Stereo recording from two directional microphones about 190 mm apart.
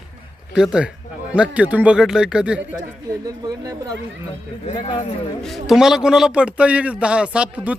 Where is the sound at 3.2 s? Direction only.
20° right (ahead or behind).